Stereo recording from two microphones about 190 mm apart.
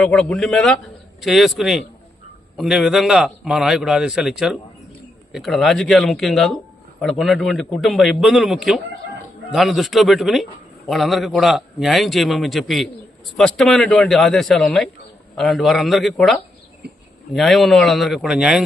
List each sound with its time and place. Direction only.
0.0 s a man's voice: 5° left (ahead or behind)
16.8 s a sound: 60° right (ahead or behind)
17.3 s a man's voice: centre (ahead or behind)